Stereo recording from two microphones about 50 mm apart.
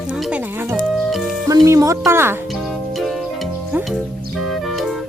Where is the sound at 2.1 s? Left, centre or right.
Right.